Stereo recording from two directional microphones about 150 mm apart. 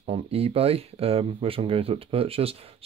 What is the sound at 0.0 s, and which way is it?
Speech, 40° right (ahead or behind).